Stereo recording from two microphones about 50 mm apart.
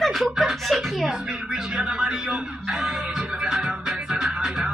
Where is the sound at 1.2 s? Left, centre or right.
Centre.